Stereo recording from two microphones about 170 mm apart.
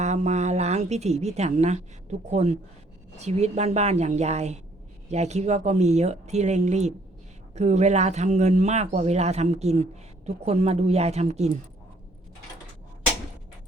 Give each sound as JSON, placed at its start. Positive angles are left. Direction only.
{"t": 0.0, "sound": "a woman's voice", "side_deg": -40}